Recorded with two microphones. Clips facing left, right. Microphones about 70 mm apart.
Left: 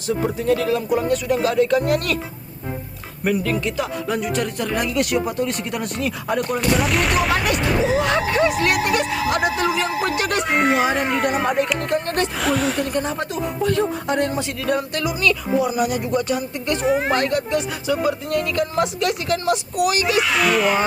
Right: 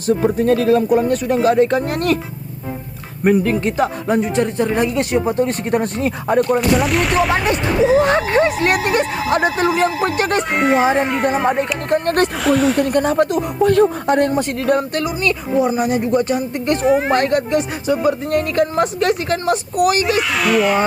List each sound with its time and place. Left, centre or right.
0.3 s speech: right
3.2 s speech: right
6.6 s speech: centre
7.9 s speech: right
10.5 s speech: centre
11.9 s a sound: right
12.4 s speech: centre
12.8 s speech: right
16.8 s speech: centre
17.2 s speech: right
20.1 s speech: centre